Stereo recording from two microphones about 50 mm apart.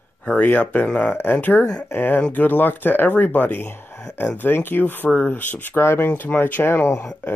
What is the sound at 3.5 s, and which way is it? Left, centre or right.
Speech, left.